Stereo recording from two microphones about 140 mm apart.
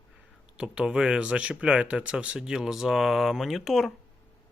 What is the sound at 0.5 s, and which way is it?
Speech, 5° right (ahead or behind).